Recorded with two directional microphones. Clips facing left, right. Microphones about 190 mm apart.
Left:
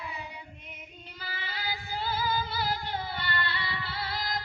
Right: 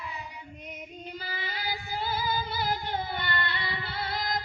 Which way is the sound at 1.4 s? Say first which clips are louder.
Even; 15° right (ahead or behind).